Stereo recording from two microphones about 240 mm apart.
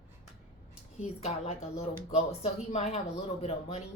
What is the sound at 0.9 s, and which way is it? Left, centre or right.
A woman's voice, left.